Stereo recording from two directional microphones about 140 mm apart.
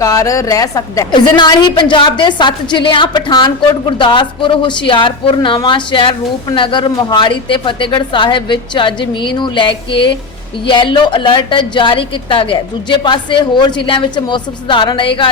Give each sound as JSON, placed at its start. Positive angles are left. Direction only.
{"t": 0.0, "sound": "a woman's voice", "side_deg": 25}